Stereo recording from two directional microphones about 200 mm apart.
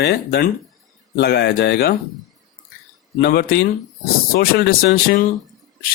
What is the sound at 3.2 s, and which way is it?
Speech, 50° left (ahead or behind).